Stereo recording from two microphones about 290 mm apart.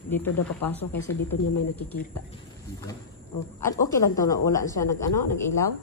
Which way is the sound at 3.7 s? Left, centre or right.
Centre.